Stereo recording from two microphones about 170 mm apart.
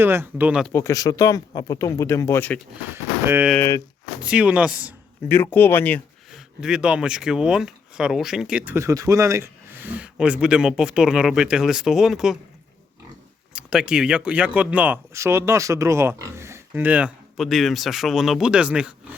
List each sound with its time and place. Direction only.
0.0 s speech: 15° right (ahead or behind)
0.7 s speech: 15° left (ahead or behind)
2.9 s speech: 10° right (ahead or behind)
3.5 s speech: 15° left (ahead or behind)
4.2 s speech: 5° right (ahead or behind)
5.3 s speech: 10° left (ahead or behind)
6.3 s speech: 5° right (ahead or behind)
13.5 s speech: 5° right (ahead or behind)